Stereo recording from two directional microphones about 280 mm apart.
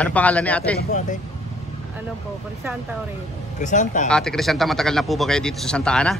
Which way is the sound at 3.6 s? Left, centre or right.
Left.